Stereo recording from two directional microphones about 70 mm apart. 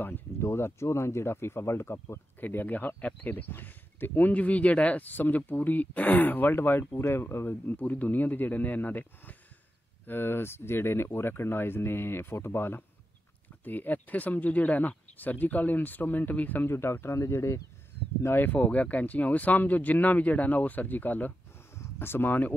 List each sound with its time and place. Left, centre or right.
0.0 s a sound: left
0.5 s speech: left
16.7 s speech: left
18.2 s speech: left